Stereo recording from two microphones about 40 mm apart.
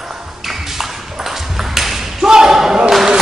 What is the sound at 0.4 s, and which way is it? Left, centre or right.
Ping, centre.